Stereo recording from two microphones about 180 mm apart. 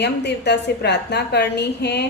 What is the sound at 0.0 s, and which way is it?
A woman's voice, 70° left (ahead or behind).